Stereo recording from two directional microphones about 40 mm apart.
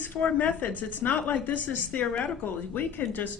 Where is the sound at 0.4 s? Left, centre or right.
Left.